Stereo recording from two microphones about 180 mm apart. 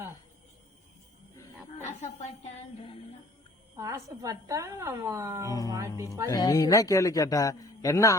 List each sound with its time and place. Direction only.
1.8 s a woman's voice: 40° left (ahead or behind)
3.8 s a woman's voice: 20° right (ahead or behind)
5.5 s a man's voice: 20° left (ahead or behind)
5.7 s a woman's voice: 15° right (ahead or behind)
6.3 s a man's voice: 20° left (ahead or behind)